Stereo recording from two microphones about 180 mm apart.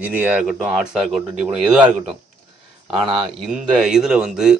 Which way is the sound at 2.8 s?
30° right (ahead or behind).